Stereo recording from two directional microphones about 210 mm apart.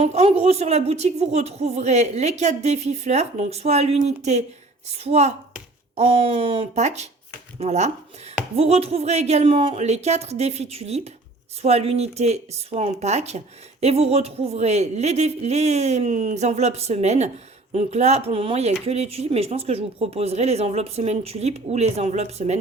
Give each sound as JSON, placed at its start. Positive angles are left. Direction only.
{"t": 0.0, "sound": "speech", "side_deg": -30}